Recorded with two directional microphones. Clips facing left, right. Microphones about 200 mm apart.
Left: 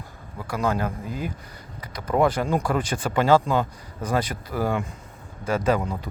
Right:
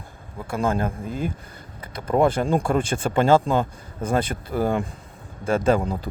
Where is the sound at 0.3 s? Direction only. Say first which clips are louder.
Right 2 dB; 25° right (ahead or behind).